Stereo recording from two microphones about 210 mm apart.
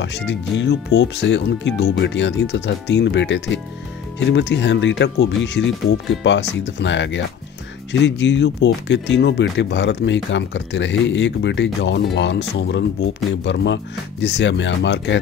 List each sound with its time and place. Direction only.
0.0 s speech: 55° left (ahead or behind)